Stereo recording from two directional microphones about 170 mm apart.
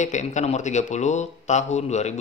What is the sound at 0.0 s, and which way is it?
A man's voice, 45° left (ahead or behind).